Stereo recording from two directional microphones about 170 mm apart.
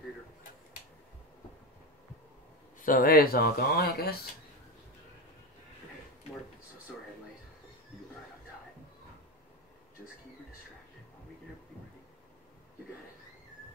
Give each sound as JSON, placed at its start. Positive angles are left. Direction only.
{"t": 2.8, "sound": "speech", "side_deg": 55}